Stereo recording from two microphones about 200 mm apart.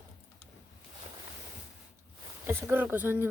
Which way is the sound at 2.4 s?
10° right (ahead or behind).